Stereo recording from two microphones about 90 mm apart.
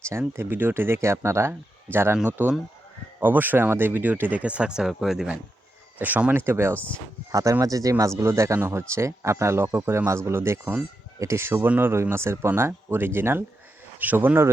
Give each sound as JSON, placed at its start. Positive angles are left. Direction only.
{"t": 0.0, "sound": "speech", "side_deg": -30}
{"t": 6.4, "sound": "speech", "side_deg": -30}
{"t": 6.7, "sound": "speech", "side_deg": 15}
{"t": 7.3, "sound": "speech", "side_deg": -35}